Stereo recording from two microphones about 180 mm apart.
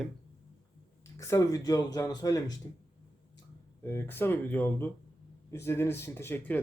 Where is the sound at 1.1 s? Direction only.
15° left (ahead or behind).